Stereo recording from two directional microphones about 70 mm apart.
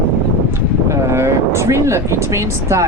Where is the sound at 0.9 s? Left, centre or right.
Right.